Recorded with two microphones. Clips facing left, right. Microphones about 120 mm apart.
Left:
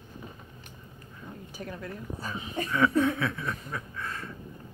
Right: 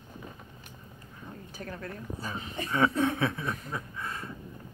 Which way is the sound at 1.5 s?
15° left (ahead or behind).